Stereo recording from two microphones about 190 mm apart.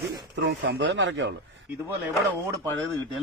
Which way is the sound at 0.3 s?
60° right (ahead or behind).